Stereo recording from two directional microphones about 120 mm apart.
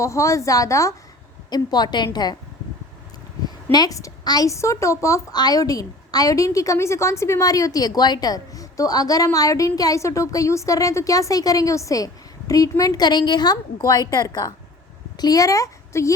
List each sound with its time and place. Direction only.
0.0 s a woman's voice: 25° left (ahead or behind)
3.7 s a woman's voice: 30° left (ahead or behind)